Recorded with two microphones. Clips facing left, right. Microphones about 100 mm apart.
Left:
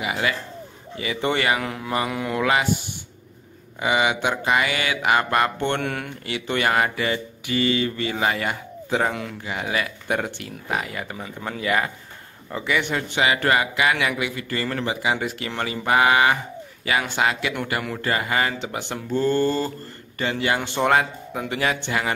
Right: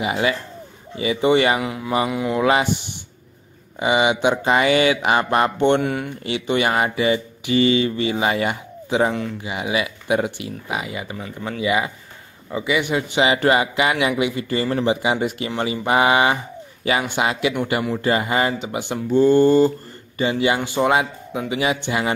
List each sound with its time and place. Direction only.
0.0 s speech: 25° right (ahead or behind)
1.6 s speech: 5° right (ahead or behind)
2.4 s speech: 25° right (ahead or behind)
5.8 s speech: 5° right (ahead or behind)
6.2 s speech: 20° right (ahead or behind)